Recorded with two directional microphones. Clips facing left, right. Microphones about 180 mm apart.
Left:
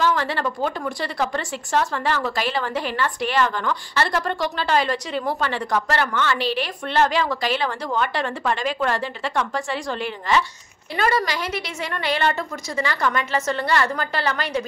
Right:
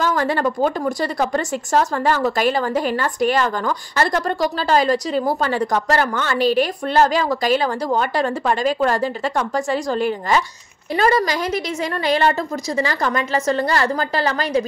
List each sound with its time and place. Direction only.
0.0 s speech: 45° right (ahead or behind)